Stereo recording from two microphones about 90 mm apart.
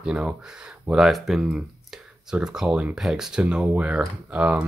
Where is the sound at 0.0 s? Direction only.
15° right (ahead or behind).